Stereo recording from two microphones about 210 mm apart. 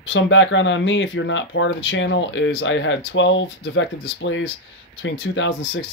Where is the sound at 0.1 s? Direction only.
60° left (ahead or behind).